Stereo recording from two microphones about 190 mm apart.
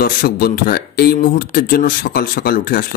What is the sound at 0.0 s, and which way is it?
Speech, 50° left (ahead or behind).